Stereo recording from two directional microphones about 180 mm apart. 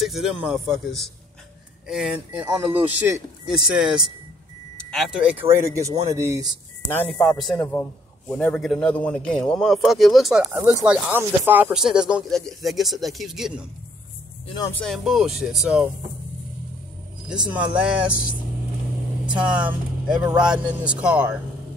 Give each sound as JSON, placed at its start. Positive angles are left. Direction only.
{"t": 0.0, "sound": "speech", "side_deg": 0}
{"t": 6.9, "sound": "a man's voice", "side_deg": 10}
{"t": 14.7, "sound": "speech", "side_deg": 5}
{"t": 17.3, "sound": "speech", "side_deg": -5}
{"t": 19.3, "sound": "speech", "side_deg": -5}